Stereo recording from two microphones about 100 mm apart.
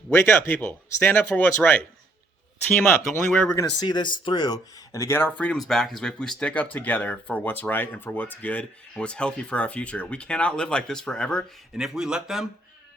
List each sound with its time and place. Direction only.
0.1 s speech: 20° left (ahead or behind)
3.5 s speech: 40° left (ahead or behind)
5.5 s speech: 5° left (ahead or behind)
11.8 s speech: 5° right (ahead or behind)